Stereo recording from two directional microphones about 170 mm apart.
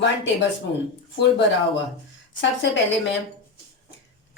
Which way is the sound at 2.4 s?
90° left.